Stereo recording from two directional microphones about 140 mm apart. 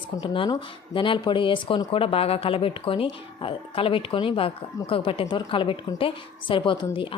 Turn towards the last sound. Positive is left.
turn(degrees=35)  # may be behind; listen again after turning